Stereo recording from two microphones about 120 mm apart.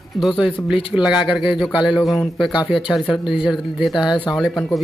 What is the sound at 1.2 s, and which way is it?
A man's voice, 45° left (ahead or behind).